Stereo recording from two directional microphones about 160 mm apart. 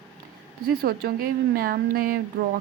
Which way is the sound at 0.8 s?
65° right (ahead or behind).